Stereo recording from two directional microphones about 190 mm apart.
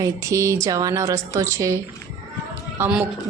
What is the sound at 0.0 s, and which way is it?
A woman's voice, 15° right (ahead or behind).